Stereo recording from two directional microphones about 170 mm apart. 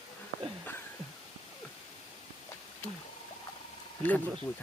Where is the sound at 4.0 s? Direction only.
10° left (ahead or behind).